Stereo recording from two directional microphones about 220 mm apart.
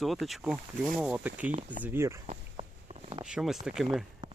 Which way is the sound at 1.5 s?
35° right (ahead or behind).